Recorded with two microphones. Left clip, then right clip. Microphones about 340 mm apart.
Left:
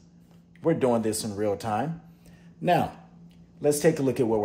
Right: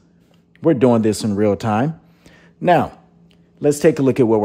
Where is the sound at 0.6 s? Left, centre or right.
Right.